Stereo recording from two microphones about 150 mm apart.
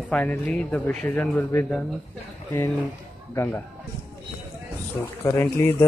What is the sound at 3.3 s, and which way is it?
Speech, 15° left (ahead or behind).